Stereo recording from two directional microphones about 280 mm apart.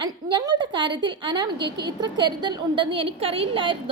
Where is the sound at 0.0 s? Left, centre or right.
Centre.